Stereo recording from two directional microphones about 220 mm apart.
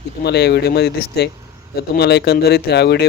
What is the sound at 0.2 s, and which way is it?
Speech, 50° left (ahead or behind).